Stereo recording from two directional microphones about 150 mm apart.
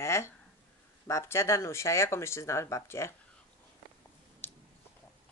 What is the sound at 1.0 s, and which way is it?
A child's voice, 20° left (ahead or behind).